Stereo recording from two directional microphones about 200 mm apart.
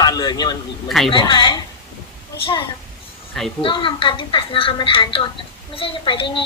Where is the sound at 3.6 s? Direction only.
25° left (ahead or behind).